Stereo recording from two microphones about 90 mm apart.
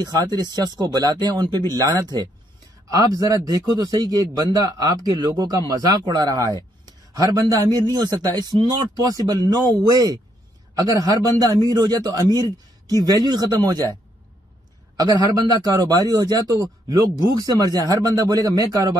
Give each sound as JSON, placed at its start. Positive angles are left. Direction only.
{"t": 0.0, "sound": "a man's voice", "side_deg": -50}
{"t": 15.0, "sound": "a man's voice", "side_deg": -45}